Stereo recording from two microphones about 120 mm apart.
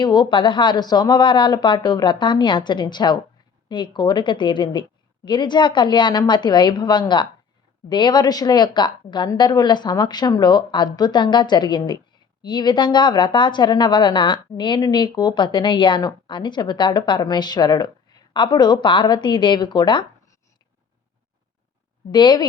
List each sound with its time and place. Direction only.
0.0 s a woman's voice: 40° left (ahead or behind)
22.1 s a woman's voice: 40° left (ahead or behind)